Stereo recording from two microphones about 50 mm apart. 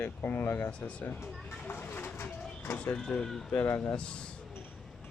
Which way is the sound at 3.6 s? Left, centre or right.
Left.